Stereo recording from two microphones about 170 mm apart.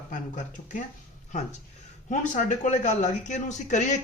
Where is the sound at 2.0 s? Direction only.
45° left (ahead or behind).